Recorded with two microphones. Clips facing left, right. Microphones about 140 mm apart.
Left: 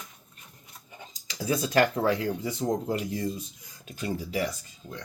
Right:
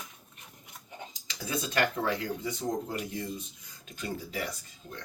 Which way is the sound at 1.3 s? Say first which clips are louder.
Left 7 dB; 30° left (ahead or behind).